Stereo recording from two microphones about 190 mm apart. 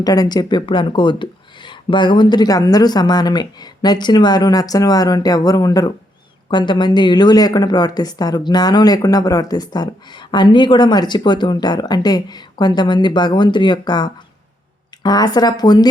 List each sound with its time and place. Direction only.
0.0 s speech: 20° left (ahead or behind)